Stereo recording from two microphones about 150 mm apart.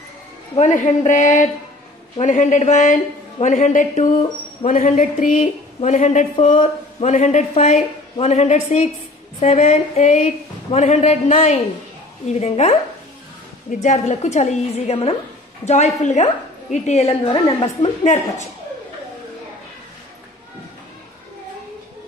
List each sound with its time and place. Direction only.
0.6 s a man's voice: 55° left (ahead or behind)